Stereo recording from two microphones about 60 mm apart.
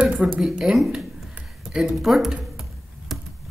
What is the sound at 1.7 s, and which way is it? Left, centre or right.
Speech, centre.